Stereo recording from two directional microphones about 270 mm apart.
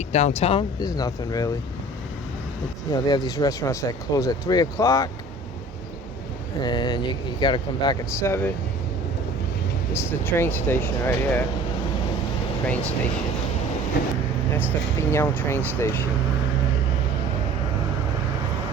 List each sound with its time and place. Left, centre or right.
0.1 s speech: left
2.9 s speech: centre
6.6 s speech: centre
10.1 s speech: centre
14.5 s speech: centre